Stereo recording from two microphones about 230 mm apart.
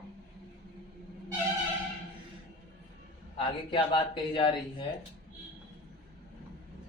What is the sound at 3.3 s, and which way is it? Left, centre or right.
A man's voice, left.